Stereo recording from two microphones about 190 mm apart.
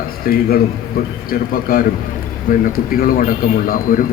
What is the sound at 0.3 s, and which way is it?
Speech, 50° left (ahead or behind).